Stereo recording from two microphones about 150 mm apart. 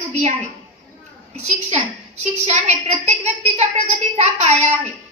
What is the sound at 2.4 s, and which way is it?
A woman's voice, 45° right (ahead or behind).